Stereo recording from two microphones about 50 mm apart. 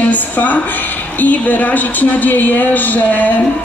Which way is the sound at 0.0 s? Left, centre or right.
Left.